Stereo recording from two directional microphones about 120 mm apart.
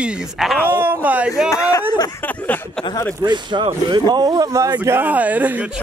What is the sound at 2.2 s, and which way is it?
Speech, 15° left (ahead or behind).